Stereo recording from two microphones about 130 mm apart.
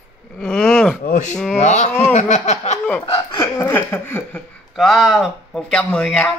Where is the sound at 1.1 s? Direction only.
70° left (ahead or behind).